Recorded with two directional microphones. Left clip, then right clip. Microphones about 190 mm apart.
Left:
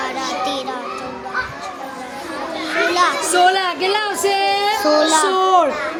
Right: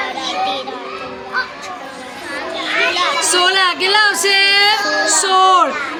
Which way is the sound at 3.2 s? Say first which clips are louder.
Right 1 dB; 5° right (ahead or behind).